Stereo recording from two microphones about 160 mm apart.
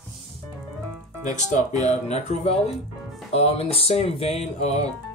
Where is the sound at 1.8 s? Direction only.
40° left (ahead or behind).